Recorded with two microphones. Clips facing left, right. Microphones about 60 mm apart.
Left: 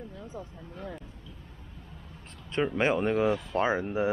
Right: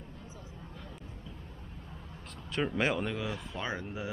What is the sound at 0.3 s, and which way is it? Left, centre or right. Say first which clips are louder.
Speech: left 6 dB; left.